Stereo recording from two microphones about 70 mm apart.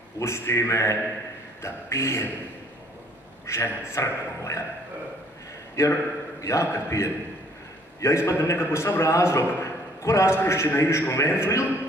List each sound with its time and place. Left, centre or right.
0.2 s a man's voice: left
3.4 s a man's voice: left
5.8 s a man's voice: left